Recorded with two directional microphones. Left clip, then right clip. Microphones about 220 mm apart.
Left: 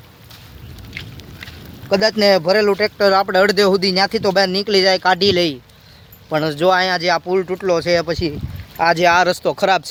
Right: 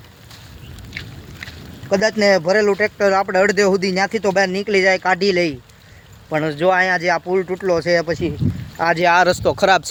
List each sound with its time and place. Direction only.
0.9 s vehicle: centre (ahead or behind)
1.9 s speech: 20° left (ahead or behind)
2.3 s speech: 5° left (ahead or behind)
6.3 s speech: 20° left (ahead or behind)
6.9 s speech: centre (ahead or behind)